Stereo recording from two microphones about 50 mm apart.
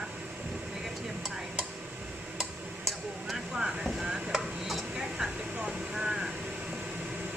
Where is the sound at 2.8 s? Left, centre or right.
Centre.